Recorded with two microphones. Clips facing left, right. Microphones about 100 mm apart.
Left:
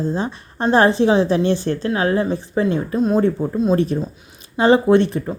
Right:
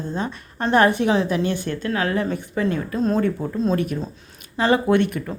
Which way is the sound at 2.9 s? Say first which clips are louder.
Left 4 dB; 10° left (ahead or behind).